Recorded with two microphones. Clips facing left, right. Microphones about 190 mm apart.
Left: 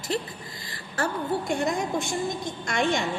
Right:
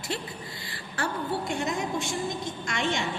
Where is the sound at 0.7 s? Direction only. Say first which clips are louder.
Left 3 dB; 40° left (ahead or behind).